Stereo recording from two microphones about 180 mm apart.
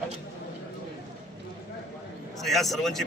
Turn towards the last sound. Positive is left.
turn(degrees=0)  # may be behind; listen again after turning